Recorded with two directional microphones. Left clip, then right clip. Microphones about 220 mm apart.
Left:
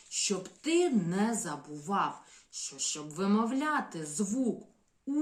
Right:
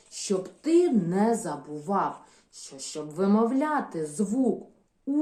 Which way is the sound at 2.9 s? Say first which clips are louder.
Right 7 dB; 35° left (ahead or behind).